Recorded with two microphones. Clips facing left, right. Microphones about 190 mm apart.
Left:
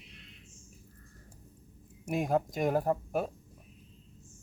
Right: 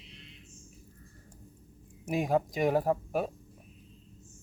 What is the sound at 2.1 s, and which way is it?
Speech, centre (ahead or behind).